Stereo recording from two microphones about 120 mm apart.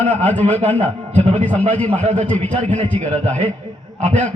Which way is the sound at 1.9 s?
80° right.